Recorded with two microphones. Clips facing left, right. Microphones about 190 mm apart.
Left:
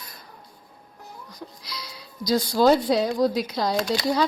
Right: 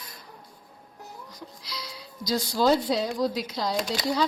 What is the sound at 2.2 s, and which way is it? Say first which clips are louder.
Speech: left 4 dB; 55° left (ahead or behind).